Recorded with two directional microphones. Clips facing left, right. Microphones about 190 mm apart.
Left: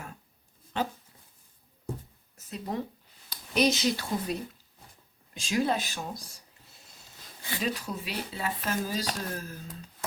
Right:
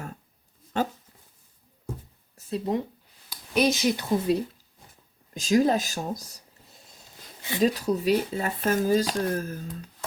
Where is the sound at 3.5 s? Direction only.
10° right (ahead or behind).